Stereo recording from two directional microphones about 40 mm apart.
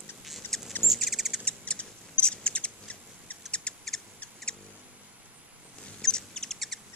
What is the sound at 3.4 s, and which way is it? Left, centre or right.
Owl, left.